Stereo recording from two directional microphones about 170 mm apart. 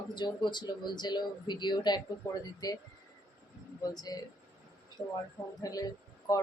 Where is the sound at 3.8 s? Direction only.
20° left (ahead or behind).